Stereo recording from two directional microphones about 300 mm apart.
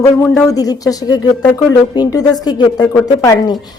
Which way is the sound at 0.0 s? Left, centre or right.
Centre.